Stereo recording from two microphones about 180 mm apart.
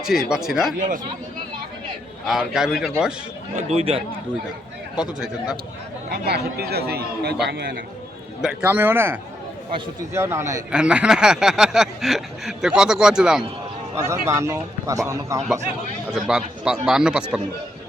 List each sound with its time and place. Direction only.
0.3 s speech: 5° right (ahead or behind)
0.8 s speech: 45° right (ahead or behind)
2.2 s speech: centre (ahead or behind)
3.5 s speech: 35° right (ahead or behind)
4.9 s speech: 5° right (ahead or behind)
6.1 s speech: 65° right (ahead or behind)
8.4 s a man's voice: 5° right (ahead or behind)
14.1 s a man's voice: 15° right (ahead or behind)
16.1 s speech: 5° right (ahead or behind)